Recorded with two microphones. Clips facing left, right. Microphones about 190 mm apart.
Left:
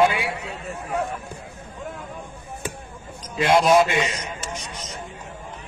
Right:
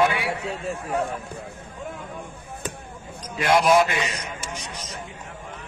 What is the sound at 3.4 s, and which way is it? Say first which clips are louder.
Speech: left 2 dB; 25° left (ahead or behind).